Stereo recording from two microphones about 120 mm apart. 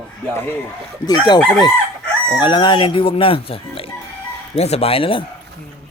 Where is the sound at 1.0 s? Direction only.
35° left (ahead or behind).